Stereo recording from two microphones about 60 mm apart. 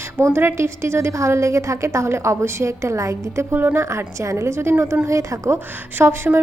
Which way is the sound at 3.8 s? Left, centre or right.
Right.